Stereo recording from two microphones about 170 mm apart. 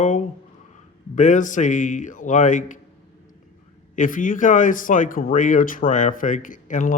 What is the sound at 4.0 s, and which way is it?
Speech, 50° left (ahead or behind).